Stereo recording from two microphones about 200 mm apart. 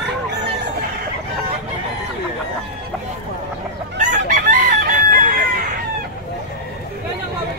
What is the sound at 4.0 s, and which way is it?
Chicken, 40° right (ahead or behind).